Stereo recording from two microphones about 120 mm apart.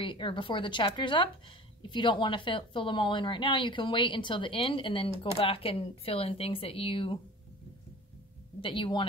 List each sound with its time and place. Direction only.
0.0 s a woman's voice: 45° left (ahead or behind)
8.5 s a woman's voice: 45° left (ahead or behind)